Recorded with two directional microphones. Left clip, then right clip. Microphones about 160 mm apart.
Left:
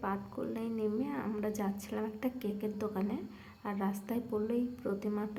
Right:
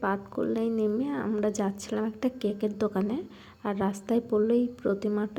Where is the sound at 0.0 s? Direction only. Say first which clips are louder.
Right 8 dB; 30° right (ahead or behind).